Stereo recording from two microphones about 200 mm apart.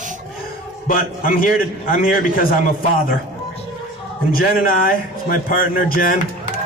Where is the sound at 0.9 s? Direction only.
45° left (ahead or behind).